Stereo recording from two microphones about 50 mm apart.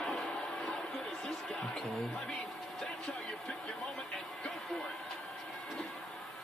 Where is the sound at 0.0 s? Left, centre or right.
Centre.